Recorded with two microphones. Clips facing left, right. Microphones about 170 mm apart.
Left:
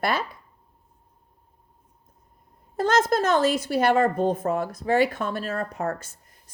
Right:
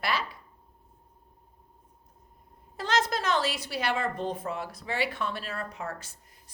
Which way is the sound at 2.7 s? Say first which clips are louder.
Left 7 dB; 50° left (ahead or behind).